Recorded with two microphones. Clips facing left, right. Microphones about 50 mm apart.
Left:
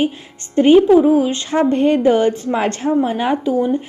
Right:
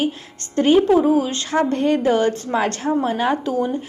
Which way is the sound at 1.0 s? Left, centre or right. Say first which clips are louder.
Left 4 dB; centre.